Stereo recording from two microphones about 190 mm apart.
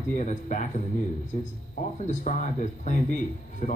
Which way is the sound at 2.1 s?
40° left (ahead or behind).